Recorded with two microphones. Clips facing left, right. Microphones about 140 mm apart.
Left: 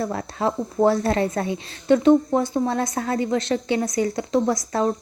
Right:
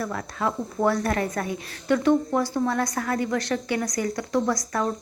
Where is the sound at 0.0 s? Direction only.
30° left (ahead or behind).